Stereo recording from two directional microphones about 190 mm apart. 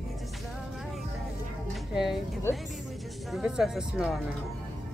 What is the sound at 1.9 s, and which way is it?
Speech, centre (ahead or behind).